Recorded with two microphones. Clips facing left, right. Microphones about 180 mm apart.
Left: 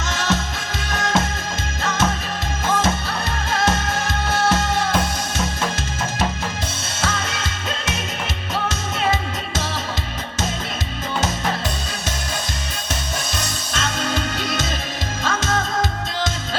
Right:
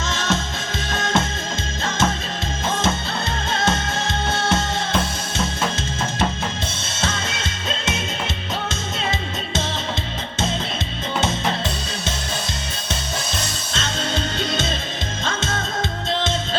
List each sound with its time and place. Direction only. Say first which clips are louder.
0.0 s music: left 1 dB; 25° right (ahead or behind)
7.0 s music: left 1 dB; 25° right (ahead or behind)
13.7 s music: left 1 dB; 25° right (ahead or behind)